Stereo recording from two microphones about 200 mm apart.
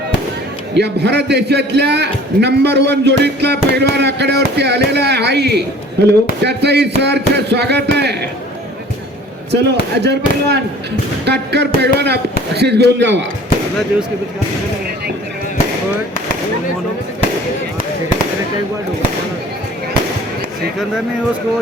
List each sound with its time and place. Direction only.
0.7 s a man's voice: 55° right (ahead or behind)
9.5 s a man's voice: 55° right (ahead or behind)